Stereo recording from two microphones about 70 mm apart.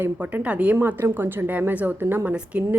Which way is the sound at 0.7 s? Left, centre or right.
Right.